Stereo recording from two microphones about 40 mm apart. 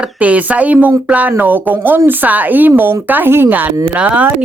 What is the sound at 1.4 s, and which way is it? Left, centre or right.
Speech, right.